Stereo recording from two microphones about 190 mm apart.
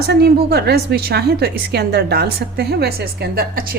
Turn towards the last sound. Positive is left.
turn(degrees=-55)  # may be behind; listen again after turning